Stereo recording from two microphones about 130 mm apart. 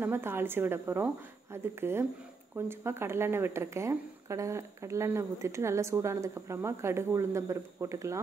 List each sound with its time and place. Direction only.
0.0 s a woman's voice: 20° right (ahead or behind)